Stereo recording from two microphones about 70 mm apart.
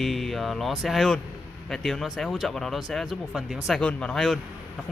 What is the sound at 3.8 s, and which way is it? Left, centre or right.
Speech, centre.